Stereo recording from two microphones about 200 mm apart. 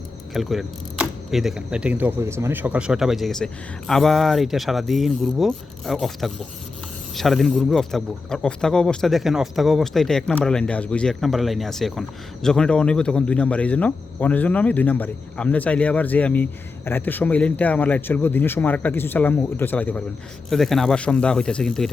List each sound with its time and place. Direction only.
0.3 s speech: centre (ahead or behind)